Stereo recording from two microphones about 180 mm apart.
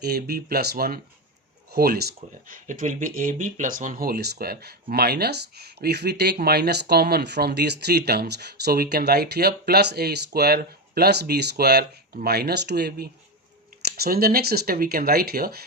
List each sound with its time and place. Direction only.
0.0 s speech: 60° right (ahead or behind)
2.5 s speech: 45° right (ahead or behind)